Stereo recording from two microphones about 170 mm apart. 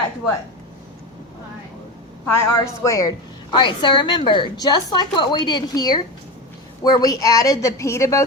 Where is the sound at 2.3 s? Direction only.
15° left (ahead or behind).